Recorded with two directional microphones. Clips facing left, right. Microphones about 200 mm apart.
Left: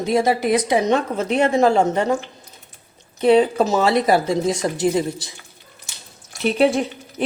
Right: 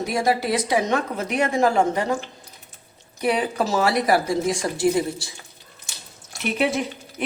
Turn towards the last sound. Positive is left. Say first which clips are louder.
# left 4 dB
turn(degrees=30)  # may be behind; listen again after turning